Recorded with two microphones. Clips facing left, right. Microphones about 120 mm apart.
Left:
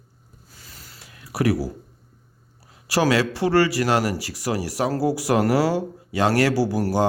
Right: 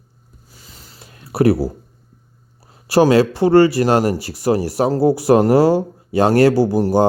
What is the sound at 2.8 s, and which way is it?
Speech, 25° right (ahead or behind).